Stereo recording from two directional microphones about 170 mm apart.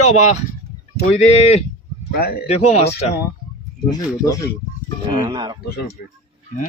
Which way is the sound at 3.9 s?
20° left (ahead or behind).